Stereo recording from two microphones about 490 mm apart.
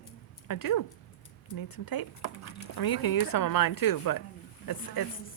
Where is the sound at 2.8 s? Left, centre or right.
Left.